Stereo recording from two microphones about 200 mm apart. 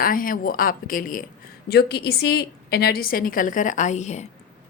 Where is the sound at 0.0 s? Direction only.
45° left (ahead or behind).